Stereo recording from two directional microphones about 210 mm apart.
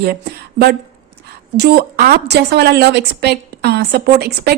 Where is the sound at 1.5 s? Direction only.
50° right (ahead or behind).